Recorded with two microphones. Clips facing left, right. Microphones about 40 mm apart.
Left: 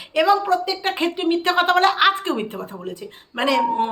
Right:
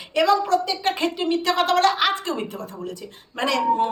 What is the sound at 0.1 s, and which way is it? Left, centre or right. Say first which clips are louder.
Speech: left 2 dB; centre.